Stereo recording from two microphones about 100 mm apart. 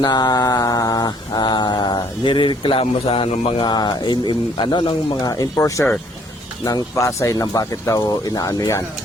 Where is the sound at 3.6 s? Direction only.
45° left (ahead or behind).